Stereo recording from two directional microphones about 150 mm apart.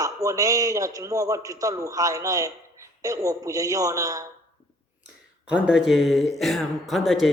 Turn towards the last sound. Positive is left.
turn(degrees=0)  # may be behind; listen again after turning